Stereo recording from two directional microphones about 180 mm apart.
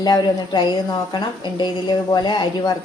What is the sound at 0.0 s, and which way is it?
A woman's voice, 25° left (ahead or behind).